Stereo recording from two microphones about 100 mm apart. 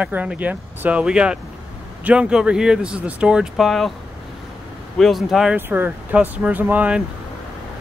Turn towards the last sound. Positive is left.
turn(degrees=-15)  # may be behind; listen again after turning